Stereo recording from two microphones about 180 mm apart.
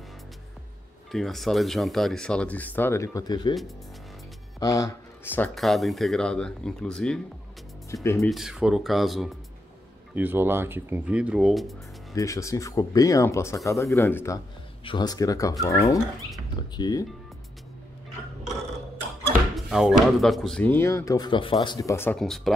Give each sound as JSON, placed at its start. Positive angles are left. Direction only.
{"t": 1.1, "sound": "speech", "side_deg": 0}
{"t": 4.6, "sound": "speech", "side_deg": 20}
{"t": 7.9, "sound": "speech", "side_deg": 15}
{"t": 8.2, "sound": "speech", "side_deg": 0}
{"t": 12.2, "sound": "speech", "side_deg": 15}
{"t": 19.5, "sound": "speech", "side_deg": 0}